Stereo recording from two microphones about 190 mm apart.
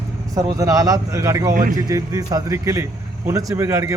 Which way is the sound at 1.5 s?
45° right (ahead or behind).